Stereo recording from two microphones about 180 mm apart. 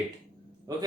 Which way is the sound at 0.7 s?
20° right (ahead or behind).